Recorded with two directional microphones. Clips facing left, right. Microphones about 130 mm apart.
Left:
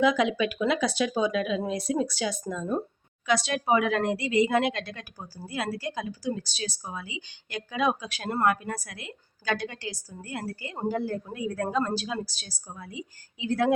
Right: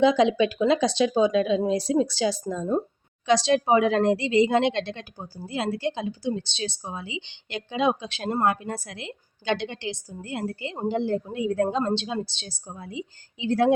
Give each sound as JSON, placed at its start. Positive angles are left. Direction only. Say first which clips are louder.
{"t": 0.0, "sound": "speech", "louder": "right 4 dB", "side_deg": -30}